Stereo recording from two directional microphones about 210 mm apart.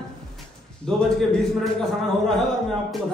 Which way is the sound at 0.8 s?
Centre (ahead or behind).